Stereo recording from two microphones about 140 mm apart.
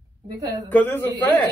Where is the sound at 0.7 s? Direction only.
15° left (ahead or behind).